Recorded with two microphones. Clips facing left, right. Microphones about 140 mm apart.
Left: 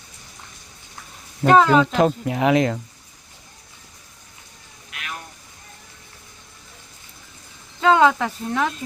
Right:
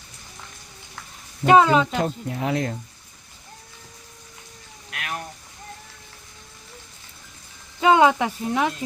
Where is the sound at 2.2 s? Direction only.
90° left.